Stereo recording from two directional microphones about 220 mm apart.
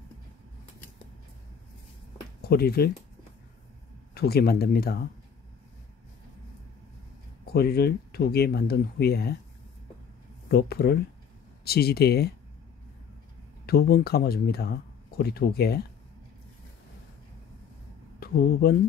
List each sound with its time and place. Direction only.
2.4 s speech: 45° left (ahead or behind)
4.1 s speech: 45° left (ahead or behind)
7.5 s speech: 45° left (ahead or behind)
10.5 s speech: 45° left (ahead or behind)
13.7 s speech: 45° left (ahead or behind)
18.2 s speech: 40° left (ahead or behind)